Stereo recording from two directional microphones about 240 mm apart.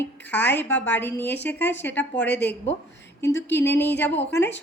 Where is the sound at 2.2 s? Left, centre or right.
Left.